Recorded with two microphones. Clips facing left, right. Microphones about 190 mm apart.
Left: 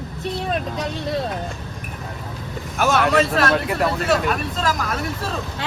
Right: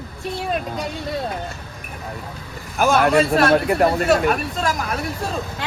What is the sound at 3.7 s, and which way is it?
Speech, 50° right (ahead or behind).